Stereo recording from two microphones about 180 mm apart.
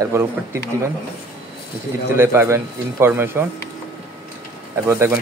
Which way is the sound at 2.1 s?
15° right (ahead or behind).